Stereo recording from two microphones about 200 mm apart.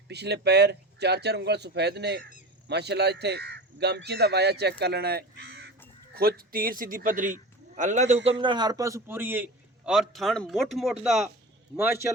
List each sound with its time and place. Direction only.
0.1 s a man's voice: 55° right (ahead or behind); by 11.3 s centre (ahead or behind)